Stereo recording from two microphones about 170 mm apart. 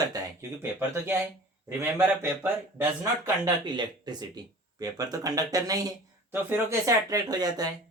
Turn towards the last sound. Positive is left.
turn(degrees=-20)  # may be behind; listen again after turning